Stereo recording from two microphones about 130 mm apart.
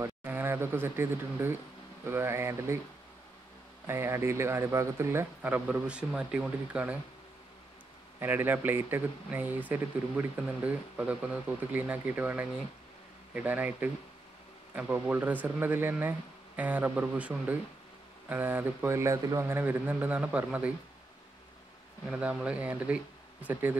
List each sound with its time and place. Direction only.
0.0 s speech: 15° right (ahead or behind)
3.8 s speech: 20° right (ahead or behind)
8.2 s speech: 15° right (ahead or behind)
22.1 s speech: 10° right (ahead or behind)